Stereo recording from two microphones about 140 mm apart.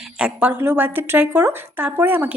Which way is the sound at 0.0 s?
5° right (ahead or behind).